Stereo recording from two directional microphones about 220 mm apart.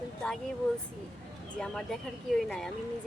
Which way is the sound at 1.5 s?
5° left (ahead or behind).